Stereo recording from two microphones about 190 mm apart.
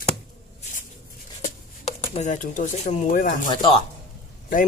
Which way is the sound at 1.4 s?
35° left (ahead or behind).